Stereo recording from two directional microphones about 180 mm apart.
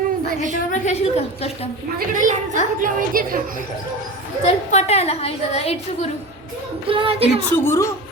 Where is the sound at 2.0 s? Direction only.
45° right (ahead or behind).